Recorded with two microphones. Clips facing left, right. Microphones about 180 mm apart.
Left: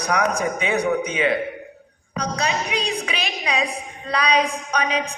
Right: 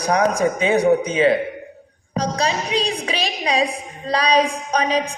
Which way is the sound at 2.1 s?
30° right (ahead or behind).